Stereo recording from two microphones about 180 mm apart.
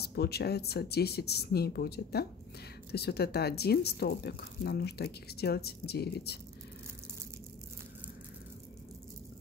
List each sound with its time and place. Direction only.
0.0 s speech: 65° left (ahead or behind)